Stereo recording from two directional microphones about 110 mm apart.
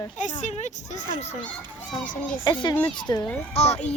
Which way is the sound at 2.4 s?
45° left (ahead or behind).